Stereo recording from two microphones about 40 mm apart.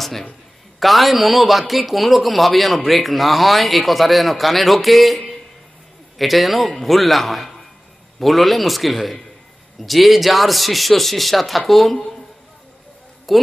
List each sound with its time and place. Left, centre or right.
0.0 s a man's voice: centre
13.3 s a man's voice: centre